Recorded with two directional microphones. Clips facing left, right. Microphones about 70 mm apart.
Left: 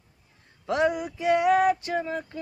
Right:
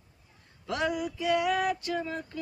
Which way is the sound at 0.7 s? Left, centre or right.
Left.